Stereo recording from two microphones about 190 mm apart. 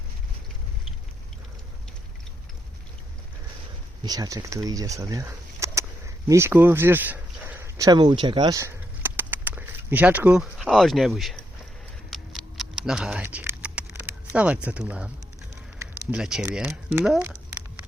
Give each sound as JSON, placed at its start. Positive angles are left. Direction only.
{"t": 4.0, "sound": "speech", "side_deg": -20}
{"t": 12.1, "sound": "typing", "side_deg": 0}
{"t": 15.8, "sound": "speech", "side_deg": -5}